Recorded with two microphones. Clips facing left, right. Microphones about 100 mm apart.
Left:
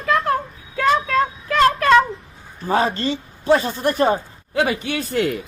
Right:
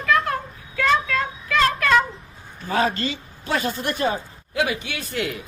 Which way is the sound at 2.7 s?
35° left (ahead or behind).